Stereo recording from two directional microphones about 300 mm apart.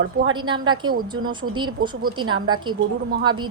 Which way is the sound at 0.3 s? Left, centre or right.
Centre.